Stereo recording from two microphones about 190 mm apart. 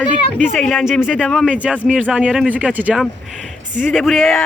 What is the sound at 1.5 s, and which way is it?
Speech, 5° right (ahead or behind).